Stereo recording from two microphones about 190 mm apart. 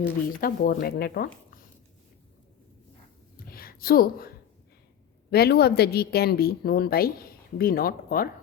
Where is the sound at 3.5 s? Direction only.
50° left (ahead or behind).